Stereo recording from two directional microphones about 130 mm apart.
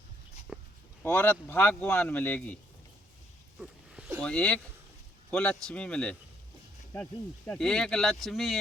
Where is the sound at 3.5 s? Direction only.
5° right (ahead or behind).